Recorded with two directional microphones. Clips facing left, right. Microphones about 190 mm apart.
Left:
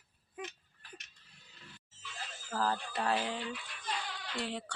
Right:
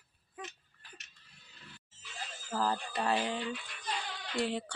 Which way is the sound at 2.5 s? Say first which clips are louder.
Right 1 dB; 15° right (ahead or behind).